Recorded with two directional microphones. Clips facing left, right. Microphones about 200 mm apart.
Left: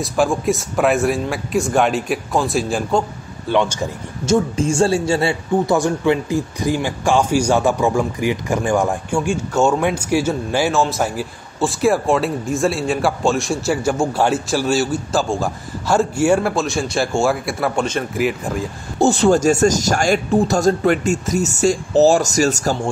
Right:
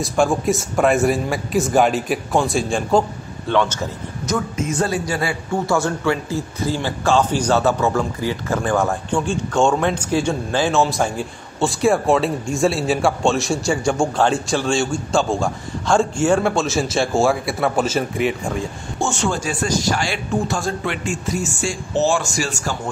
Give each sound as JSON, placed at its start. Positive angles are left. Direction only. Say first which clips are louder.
{"t": 0.0, "sound": "a man's voice", "louder": "even", "side_deg": 0}
{"t": 3.4, "sound": "speech", "louder": "left 1 dB", "side_deg": 10}
{"t": 4.3, "sound": "a man's voice", "louder": "left 6 dB", "side_deg": 30}
{"t": 18.9, "sound": "speech", "louder": "left 9 dB", "side_deg": 35}